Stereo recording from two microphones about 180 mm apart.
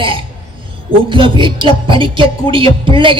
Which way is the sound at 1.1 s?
30° right (ahead or behind).